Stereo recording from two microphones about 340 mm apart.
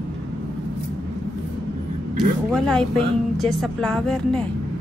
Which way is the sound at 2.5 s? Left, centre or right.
Centre.